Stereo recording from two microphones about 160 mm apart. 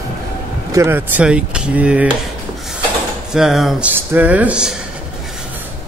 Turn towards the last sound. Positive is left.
turn(degrees=-5)  # may be behind; listen again after turning